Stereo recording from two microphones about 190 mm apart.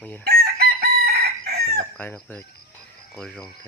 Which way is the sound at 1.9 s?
10° left (ahead or behind).